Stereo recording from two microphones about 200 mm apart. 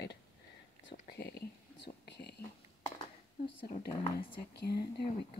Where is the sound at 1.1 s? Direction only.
55° left (ahead or behind).